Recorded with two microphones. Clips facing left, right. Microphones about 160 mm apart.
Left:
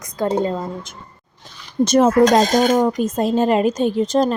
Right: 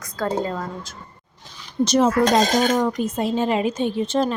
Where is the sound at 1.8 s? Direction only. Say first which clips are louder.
Left 4 dB; 50° left (ahead or behind).